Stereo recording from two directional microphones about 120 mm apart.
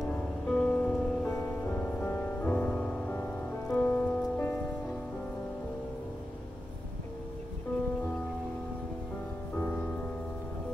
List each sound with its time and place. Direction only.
0.0 s music: 5° left (ahead or behind)
9.6 s music: 15° left (ahead or behind)